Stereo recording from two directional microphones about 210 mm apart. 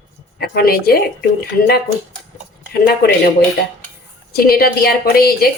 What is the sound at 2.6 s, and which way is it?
Speech, 50° left (ahead or behind).